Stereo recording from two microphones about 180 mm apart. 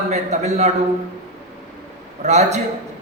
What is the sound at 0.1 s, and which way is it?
Speech, 40° right (ahead or behind).